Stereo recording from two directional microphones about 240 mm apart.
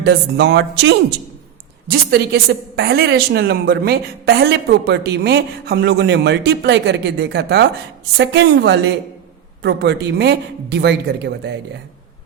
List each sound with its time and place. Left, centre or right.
0.0 s a woman's voice: right